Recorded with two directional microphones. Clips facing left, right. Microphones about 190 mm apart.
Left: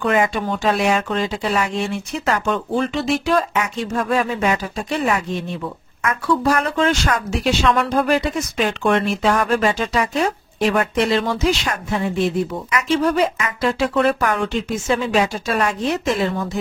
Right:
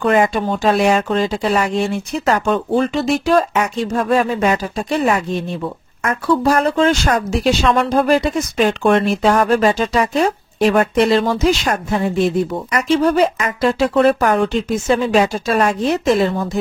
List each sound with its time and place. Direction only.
0.0 s speech: 40° right (ahead or behind)